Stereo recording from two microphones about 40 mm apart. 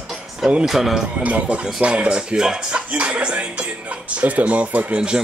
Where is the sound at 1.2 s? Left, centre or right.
Right; by 2.8 s centre.